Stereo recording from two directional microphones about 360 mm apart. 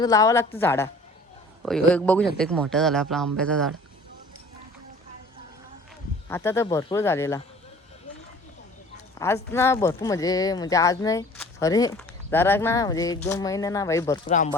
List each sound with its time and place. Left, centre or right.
0.0 s speech: centre
6.2 s speech: centre
9.1 s speech: centre
14.3 s speech: left